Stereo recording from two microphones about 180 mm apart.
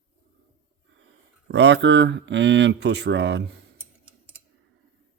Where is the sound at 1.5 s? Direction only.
75° right (ahead or behind).